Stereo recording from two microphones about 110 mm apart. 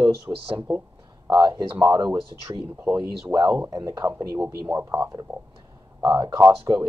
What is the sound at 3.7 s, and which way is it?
Speech, 30° right (ahead or behind).